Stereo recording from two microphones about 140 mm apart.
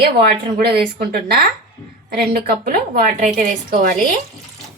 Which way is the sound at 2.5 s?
90° right.